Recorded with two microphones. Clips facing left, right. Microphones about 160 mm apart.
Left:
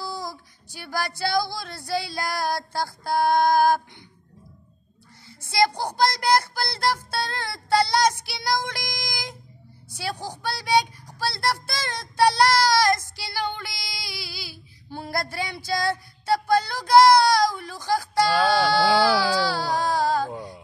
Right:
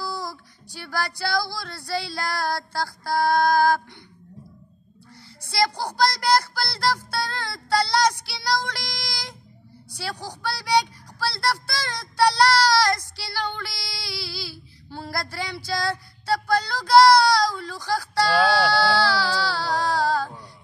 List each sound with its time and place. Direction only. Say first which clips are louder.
0.0 s music: right 1 dB; 20° left (ahead or behind)
0.7 s speech: even; 20° left (ahead or behind)
5.5 s speech: left 2 dB; 20° left (ahead or behind)
10.4 s child singing: even; 20° left (ahead or behind)